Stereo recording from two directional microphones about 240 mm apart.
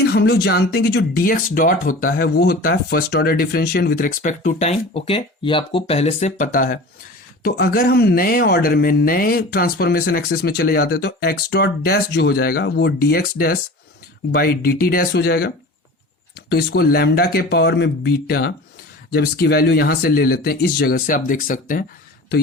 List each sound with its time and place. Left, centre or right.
0.1 s speech: left